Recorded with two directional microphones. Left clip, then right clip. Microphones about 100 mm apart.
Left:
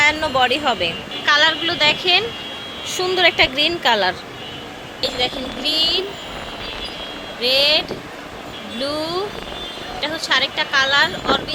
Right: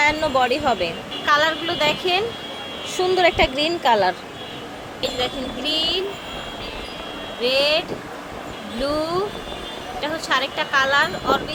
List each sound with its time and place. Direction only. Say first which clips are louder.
0.0 s speech: left 2 dB; 5° right (ahead or behind)
1.2 s a woman's voice: left 3 dB; 10° right (ahead or behind)
4.9 s speech: left 3 dB; centre (ahead or behind)
7.4 s speech: left 3 dB; centre (ahead or behind)